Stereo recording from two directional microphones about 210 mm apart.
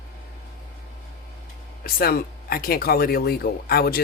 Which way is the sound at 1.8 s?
45° left (ahead or behind).